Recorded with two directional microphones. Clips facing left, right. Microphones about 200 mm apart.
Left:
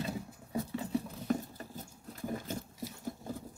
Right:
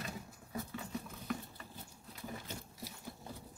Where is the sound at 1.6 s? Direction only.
45° left (ahead or behind).